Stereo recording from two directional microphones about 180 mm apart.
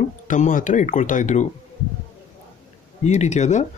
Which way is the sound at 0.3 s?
45° left (ahead or behind).